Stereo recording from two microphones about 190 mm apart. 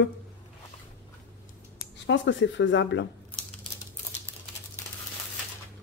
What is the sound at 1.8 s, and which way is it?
Speech, 70° left (ahead or behind).